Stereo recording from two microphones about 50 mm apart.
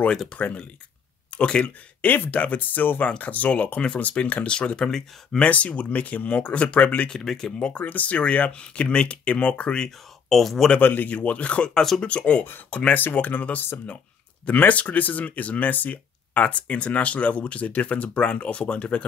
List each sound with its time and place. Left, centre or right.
0.4 s speech: left
1.3 s speech: centre
2.0 s speech: left; by 5.5 s centre
5.5 s speech: left
7.1 s speech: centre
7.8 s speech: left
9.8 s speech: centre
10.8 s speech: left
11.7 s speech: centre
12.0 s speech: left